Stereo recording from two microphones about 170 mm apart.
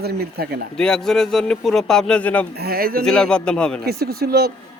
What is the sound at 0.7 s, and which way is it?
Speech, 5° left (ahead or behind).